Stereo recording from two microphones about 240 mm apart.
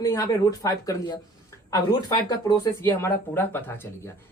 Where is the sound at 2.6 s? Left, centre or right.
Centre.